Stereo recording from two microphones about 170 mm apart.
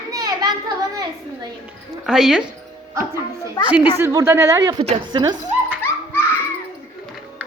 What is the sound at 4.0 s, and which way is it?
A child's voice, 20° right (ahead or behind).